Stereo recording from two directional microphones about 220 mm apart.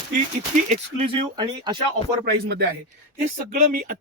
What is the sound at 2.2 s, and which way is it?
Speech, 45° right (ahead or behind).